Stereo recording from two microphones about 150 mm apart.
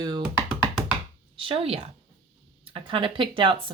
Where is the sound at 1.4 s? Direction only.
35° right (ahead or behind).